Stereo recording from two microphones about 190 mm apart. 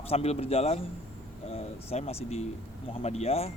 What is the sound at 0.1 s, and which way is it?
Speech, 30° left (ahead or behind).